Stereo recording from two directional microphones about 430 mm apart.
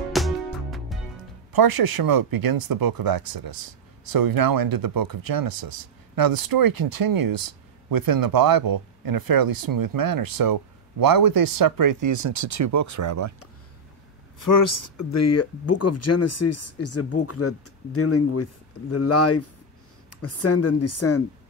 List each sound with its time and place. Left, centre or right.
0.1 s music: centre
1.5 s speech: right
14.4 s speech: left